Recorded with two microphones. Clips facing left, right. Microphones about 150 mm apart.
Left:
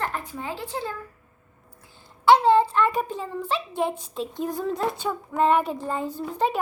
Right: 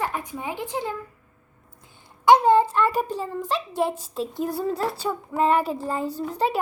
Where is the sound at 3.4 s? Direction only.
40° right (ahead or behind).